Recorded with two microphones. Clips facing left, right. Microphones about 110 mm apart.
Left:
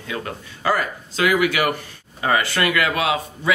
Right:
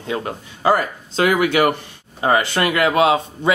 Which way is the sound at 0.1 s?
30° right (ahead or behind).